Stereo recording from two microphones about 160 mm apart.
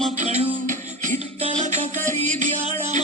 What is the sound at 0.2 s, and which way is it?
Music, 45° right (ahead or behind).